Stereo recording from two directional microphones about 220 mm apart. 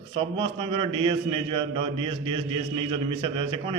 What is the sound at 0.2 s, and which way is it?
A man's voice, 25° right (ahead or behind).